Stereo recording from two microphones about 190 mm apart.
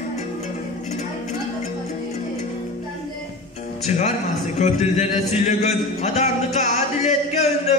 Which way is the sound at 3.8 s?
35° left (ahead or behind).